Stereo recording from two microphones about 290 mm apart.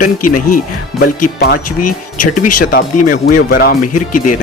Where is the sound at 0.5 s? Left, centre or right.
Left.